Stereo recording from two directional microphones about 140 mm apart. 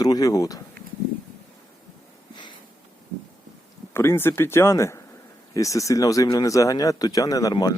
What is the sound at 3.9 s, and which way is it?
Speech, 15° left (ahead or behind).